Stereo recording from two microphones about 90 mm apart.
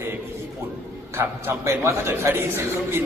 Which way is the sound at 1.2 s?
25° right (ahead or behind).